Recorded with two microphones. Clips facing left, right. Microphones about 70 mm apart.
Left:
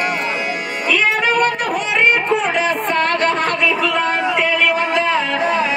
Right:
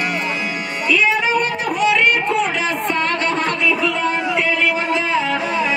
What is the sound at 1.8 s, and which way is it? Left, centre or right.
Chatter, left.